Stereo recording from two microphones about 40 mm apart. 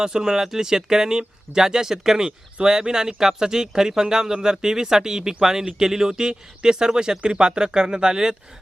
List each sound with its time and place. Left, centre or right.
0.0 s speech: centre